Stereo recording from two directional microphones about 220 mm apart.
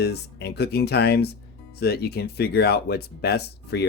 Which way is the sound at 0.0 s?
50° left (ahead or behind).